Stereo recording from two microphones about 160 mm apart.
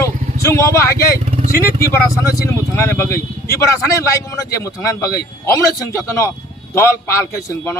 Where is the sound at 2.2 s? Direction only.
15° left (ahead or behind).